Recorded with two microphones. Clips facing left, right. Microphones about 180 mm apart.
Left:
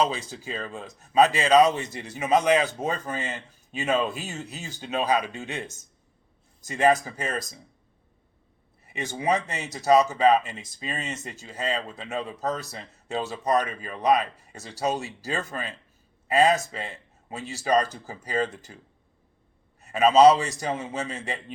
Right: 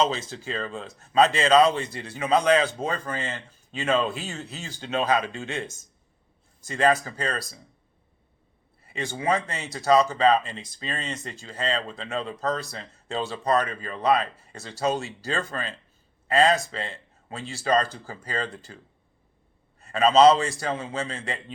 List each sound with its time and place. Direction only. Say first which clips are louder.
0.0 s speech: right 1 dB; 15° left (ahead or behind)
6.7 s speech: left 1 dB; 15° left (ahead or behind)
8.8 s a sound: right 1 dB; 20° left (ahead or behind)
9.1 s speech: left 1 dB; 15° left (ahead or behind)
19.8 s speech: left 1 dB; 15° left (ahead or behind)